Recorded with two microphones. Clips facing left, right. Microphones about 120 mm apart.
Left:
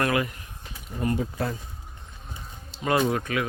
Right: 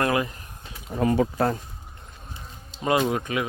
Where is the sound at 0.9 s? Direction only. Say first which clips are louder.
Right 6 dB; 90° right.